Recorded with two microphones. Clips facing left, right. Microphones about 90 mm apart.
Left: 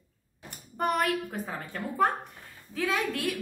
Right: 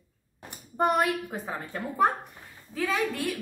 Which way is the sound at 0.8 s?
15° right (ahead or behind).